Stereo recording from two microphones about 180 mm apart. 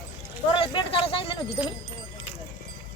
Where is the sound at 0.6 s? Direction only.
30° left (ahead or behind).